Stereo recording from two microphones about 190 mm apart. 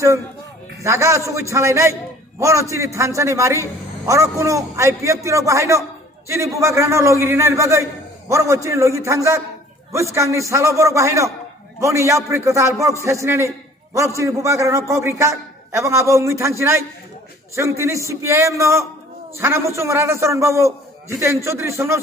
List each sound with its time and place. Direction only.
0.8 s a man's voice: 15° right (ahead or behind)